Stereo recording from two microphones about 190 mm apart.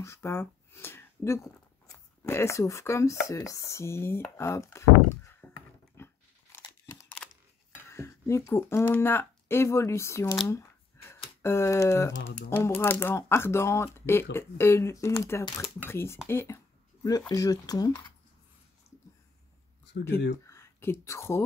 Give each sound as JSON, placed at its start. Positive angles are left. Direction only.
{"t": 0.0, "sound": "speech", "side_deg": 15}
{"t": 6.0, "sound": "biting", "side_deg": 10}
{"t": 7.2, "sound": "camera", "side_deg": 5}
{"t": 7.9, "sound": "speech", "side_deg": 15}
{"t": 16.3, "sound": "a sound", "side_deg": 15}
{"t": 17.3, "sound": "speech", "side_deg": 20}
{"t": 20.4, "sound": "a sound", "side_deg": 15}